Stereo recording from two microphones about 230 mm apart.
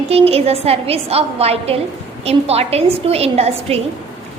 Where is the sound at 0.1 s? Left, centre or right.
Right.